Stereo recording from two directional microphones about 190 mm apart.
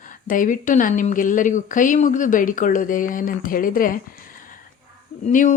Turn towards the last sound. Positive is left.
turn(degrees=40)  # may be behind; listen again after turning